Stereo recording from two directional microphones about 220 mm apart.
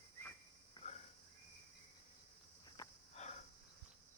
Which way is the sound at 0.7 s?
30° left (ahead or behind).